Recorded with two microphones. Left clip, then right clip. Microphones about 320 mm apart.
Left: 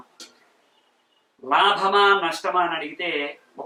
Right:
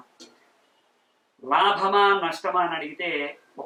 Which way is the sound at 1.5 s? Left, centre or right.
Centre.